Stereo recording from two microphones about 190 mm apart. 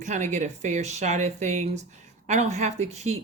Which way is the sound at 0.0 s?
40° right (ahead or behind).